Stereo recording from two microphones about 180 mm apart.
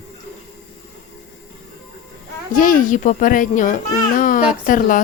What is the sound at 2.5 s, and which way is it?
A child's voice, 50° left (ahead or behind).